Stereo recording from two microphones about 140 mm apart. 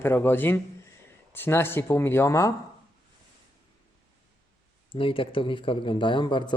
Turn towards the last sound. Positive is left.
turn(degrees=35)  # may be behind; listen again after turning